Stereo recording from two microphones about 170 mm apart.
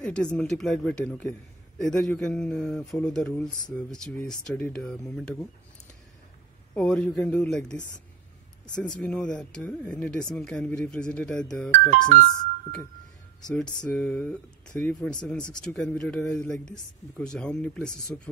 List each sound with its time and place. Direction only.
0.0 s speech: 5° left (ahead or behind)
6.7 s speech: 10° left (ahead or behind)
8.7 s speech: 5° left (ahead or behind)
13.4 s speech: 5° left (ahead or behind)